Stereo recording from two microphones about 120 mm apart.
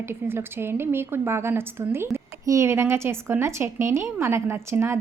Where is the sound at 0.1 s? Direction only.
20° right (ahead or behind).